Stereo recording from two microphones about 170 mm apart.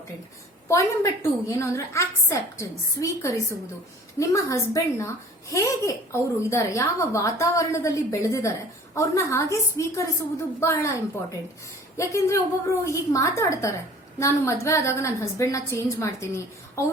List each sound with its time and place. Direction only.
0.7 s a woman's voice: 15° left (ahead or behind)